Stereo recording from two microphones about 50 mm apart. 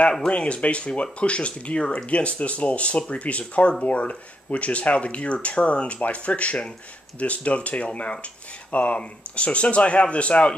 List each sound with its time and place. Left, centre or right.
0.3 s speech: left